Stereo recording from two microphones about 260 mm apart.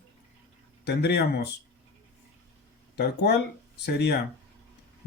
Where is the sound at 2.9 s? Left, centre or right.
Left.